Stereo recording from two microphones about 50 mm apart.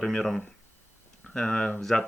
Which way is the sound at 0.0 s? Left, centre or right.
Centre.